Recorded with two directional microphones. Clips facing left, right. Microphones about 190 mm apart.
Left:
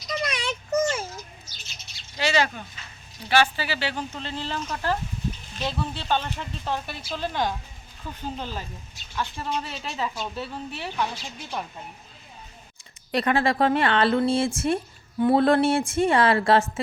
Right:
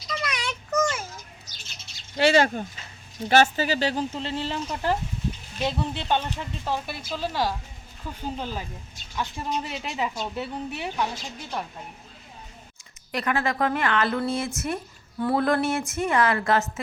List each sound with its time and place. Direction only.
0.2 s a sound: 30° left (ahead or behind)
2.1 s speech: 55° right (ahead or behind)
4.1 s a woman's voice: 25° right (ahead or behind)
13.1 s speech: 30° left (ahead or behind)